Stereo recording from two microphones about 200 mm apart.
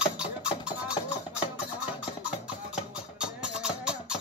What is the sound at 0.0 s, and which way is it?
Music, 5° right (ahead or behind).